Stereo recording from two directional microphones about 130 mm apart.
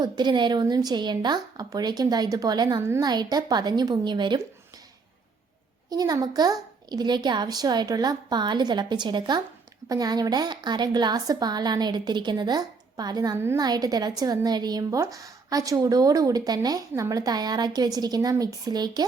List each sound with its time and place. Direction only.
0.0 s a woman's voice: 35° right (ahead or behind)
2.8 s speech: 20° right (ahead or behind)
3.1 s a woman's voice: 30° right (ahead or behind)
5.9 s a woman's voice: 30° right (ahead or behind)